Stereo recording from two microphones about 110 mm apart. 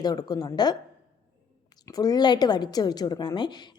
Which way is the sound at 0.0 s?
35° left (ahead or behind).